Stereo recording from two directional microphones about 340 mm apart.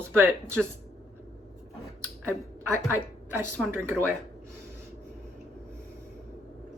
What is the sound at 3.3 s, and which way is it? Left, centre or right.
Speech, centre.